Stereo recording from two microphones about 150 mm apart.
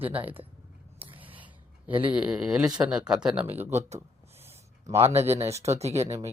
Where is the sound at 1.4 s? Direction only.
10° right (ahead or behind).